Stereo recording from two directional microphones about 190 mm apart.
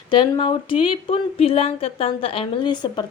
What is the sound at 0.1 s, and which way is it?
A woman's voice, 25° left (ahead or behind).